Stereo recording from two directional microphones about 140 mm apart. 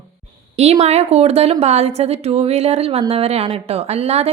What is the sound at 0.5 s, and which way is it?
A woman's voice, 50° right (ahead or behind).